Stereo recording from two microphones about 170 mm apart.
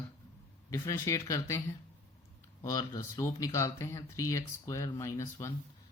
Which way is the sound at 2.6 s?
20° left (ahead or behind).